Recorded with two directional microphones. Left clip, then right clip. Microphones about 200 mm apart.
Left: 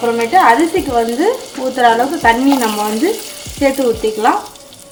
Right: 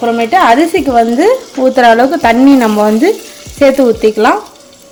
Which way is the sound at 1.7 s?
50° right (ahead or behind).